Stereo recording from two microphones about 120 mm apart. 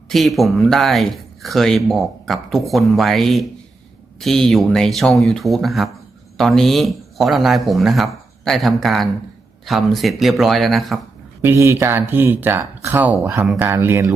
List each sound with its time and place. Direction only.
0.1 s speech: centre (ahead or behind)
11.4 s speech: 25° right (ahead or behind)